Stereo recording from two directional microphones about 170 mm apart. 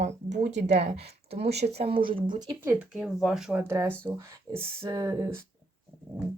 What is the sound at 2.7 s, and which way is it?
Speech, 5° right (ahead or behind).